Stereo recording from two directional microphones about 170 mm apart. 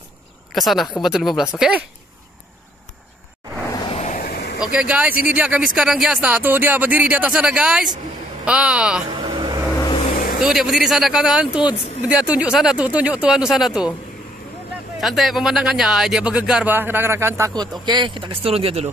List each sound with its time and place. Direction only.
0.5 s speech: centre (ahead or behind)
3.9 s vehicle: 45° left (ahead or behind)
4.2 s vehicle: 70° left (ahead or behind)
4.6 s speech: 5° right (ahead or behind)
9.2 s vehicle: 25° right (ahead or behind)
10.1 s vehicle: 60° left (ahead or behind)
10.4 s speech: centre (ahead or behind)
15.0 s speech: centre (ahead or behind); by 18.9 s 35° right (ahead or behind)